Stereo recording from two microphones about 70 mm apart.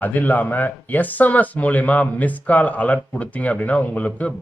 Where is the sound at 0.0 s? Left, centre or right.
Left.